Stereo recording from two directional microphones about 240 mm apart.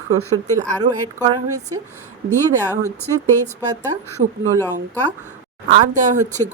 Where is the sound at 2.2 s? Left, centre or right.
Centre.